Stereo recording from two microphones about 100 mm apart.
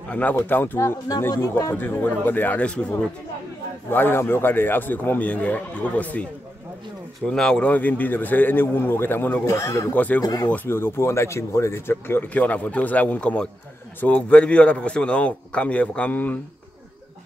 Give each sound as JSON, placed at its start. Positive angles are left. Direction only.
{"t": 0.1, "sound": "a man's voice", "side_deg": 15}
{"t": 3.9, "sound": "speech", "side_deg": 20}
{"t": 7.2, "sound": "a man's voice", "side_deg": 5}
{"t": 9.9, "sound": "a man's voice", "side_deg": 15}
{"t": 10.2, "sound": "speech", "side_deg": 40}
{"t": 10.5, "sound": "a man's voice", "side_deg": 20}